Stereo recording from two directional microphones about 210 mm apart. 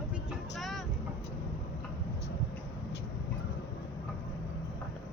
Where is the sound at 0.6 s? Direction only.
Centre (ahead or behind).